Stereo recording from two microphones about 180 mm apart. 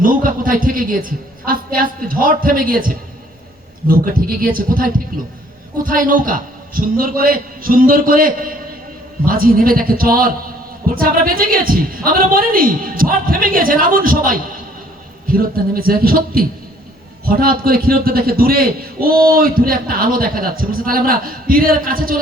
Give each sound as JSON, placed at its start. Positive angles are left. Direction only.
{"t": 0.0, "sound": "a man's voice", "side_deg": -50}